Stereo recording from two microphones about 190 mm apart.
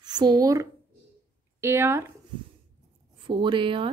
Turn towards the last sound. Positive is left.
turn(degrees=-25)  # may be behind; listen again after turning